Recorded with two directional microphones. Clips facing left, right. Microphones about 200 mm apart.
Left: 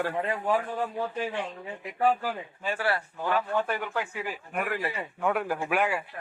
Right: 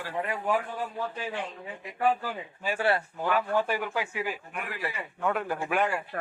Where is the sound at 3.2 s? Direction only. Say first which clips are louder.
Left 1 dB; 10° right (ahead or behind).